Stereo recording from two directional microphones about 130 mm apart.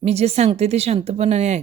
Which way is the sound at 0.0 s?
55° right (ahead or behind).